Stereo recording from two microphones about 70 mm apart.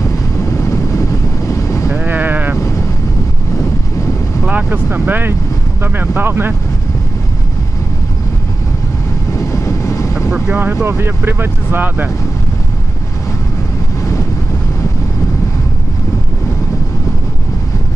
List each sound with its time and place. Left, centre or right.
0.6 s vehicle: left
1.5 s sheep: left
2.0 s sheep: right
4.5 s speech: right
9.3 s vehicle: left
10.3 s speech: centre
10.9 s speech: right